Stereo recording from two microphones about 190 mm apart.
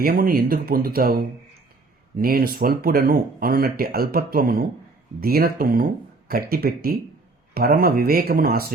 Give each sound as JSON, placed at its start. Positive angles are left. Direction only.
{"t": 0.0, "sound": "speech", "side_deg": -50}